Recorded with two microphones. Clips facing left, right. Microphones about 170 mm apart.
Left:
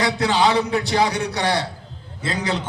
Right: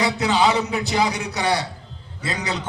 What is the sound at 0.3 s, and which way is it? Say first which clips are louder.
A man's voice: left 1 dB; 30° left (ahead or behind).